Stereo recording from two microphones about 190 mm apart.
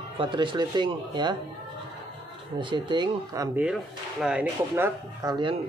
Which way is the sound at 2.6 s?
25° right (ahead or behind).